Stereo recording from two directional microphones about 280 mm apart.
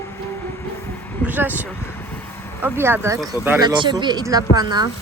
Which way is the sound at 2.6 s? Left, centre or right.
Centre.